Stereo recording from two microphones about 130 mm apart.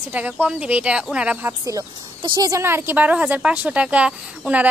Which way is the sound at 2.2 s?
30° right (ahead or behind).